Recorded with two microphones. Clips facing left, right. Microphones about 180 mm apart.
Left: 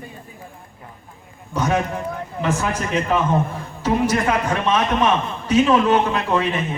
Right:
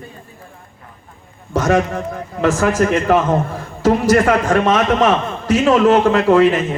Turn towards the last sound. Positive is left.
turn(degrees=-90)